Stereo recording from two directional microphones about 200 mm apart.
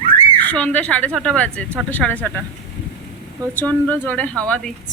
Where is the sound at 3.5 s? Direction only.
10° left (ahead or behind).